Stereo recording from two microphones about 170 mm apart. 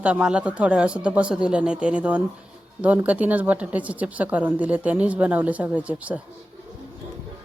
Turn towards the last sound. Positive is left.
turn(degrees=-10)  # may be behind; listen again after turning